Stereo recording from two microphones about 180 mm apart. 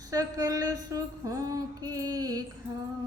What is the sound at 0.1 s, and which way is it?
A woman's voice, 20° right (ahead or behind).